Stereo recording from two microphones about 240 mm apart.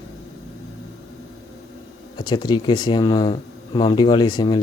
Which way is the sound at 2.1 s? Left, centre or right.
Centre.